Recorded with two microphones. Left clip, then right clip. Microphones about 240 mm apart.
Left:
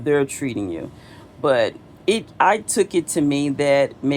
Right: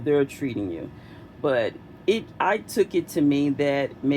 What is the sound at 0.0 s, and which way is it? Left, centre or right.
Speech, left.